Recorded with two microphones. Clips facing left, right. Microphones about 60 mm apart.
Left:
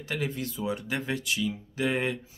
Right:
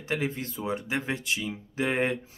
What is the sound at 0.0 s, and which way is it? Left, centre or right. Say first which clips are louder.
Speech: right 2 dB; right.